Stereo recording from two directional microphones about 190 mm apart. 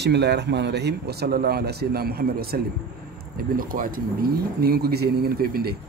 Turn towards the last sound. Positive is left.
turn(degrees=-55)  # may be behind; listen again after turning